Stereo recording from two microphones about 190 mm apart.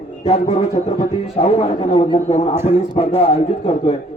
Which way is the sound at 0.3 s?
30° left (ahead or behind).